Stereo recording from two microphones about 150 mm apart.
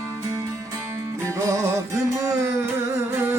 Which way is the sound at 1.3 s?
20° right (ahead or behind).